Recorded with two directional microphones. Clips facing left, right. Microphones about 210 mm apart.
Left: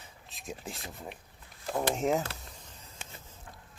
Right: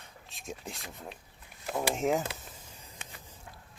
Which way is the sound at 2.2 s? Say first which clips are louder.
Right 2 dB; 15° right (ahead or behind).